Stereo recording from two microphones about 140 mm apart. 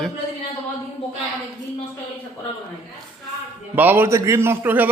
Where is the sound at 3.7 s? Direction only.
15° right (ahead or behind).